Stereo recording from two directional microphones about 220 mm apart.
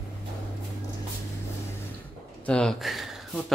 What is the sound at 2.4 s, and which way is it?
Speech, 5° left (ahead or behind).